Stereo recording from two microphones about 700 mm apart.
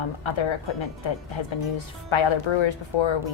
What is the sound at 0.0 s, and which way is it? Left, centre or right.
A woman's voice, left.